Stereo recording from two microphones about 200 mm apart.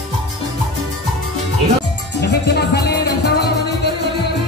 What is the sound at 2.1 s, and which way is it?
Music, 55° left (ahead or behind).